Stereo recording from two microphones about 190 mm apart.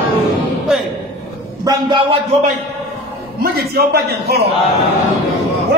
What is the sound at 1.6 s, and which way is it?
Speech, 20° right (ahead or behind).